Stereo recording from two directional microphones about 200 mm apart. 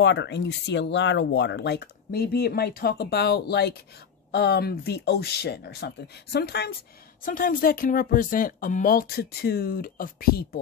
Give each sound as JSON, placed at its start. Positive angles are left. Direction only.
{"t": 0.0, "sound": "speech", "side_deg": 60}